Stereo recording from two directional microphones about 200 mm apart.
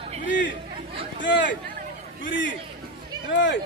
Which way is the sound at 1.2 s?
65° left (ahead or behind).